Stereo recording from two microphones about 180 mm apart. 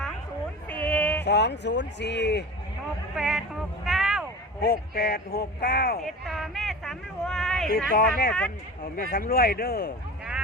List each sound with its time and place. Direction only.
0.7 s a sound: 10° left (ahead or behind)
1.2 s speech: 70° left (ahead or behind)
3.2 s a sound: centre (ahead or behind)
4.6 s speech: 55° left (ahead or behind)
6.0 s speech: centre (ahead or behind)
7.7 s speech: 55° left (ahead or behind)
8.3 s speech: 5° left (ahead or behind)
9.1 s speech: 55° left (ahead or behind)